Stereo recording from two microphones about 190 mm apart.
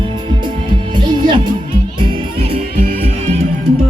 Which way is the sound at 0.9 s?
25° right (ahead or behind).